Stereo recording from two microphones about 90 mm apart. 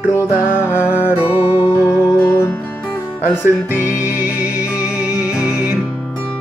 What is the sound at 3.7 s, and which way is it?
Music, 30° left (ahead or behind).